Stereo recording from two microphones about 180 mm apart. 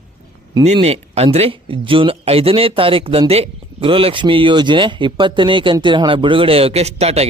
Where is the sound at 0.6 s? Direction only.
35° right (ahead or behind).